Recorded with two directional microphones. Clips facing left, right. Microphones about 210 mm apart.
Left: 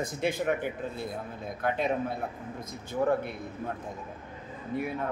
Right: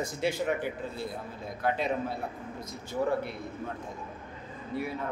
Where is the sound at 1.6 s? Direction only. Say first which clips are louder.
Left 1 dB; 50° left (ahead or behind).